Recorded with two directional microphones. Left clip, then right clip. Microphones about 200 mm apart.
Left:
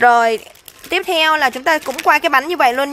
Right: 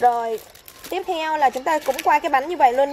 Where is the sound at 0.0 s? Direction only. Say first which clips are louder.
Left 8 dB; 50° left (ahead or behind).